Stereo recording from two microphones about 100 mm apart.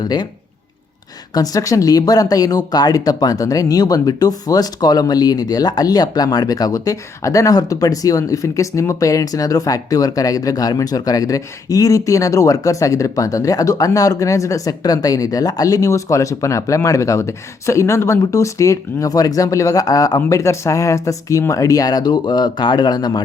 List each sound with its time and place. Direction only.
0.0 s speech: 45° left (ahead or behind)
1.3 s speech: 40° left (ahead or behind)